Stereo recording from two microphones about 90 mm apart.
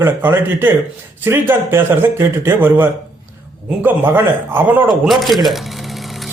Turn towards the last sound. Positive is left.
turn(degrees=0)  # may be behind; listen again after turning